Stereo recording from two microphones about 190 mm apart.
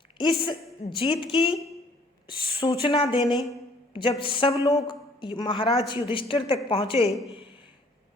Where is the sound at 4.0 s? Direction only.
25° left (ahead or behind).